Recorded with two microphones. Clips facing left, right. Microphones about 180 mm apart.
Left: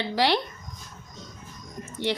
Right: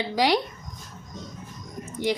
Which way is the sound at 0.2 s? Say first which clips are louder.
Right 2 dB; 10° right (ahead or behind).